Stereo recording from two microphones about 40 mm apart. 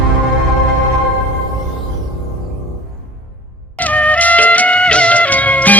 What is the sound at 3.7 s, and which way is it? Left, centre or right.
Music, left.